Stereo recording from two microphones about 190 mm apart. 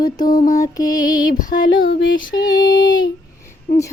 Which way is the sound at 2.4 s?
20° left (ahead or behind).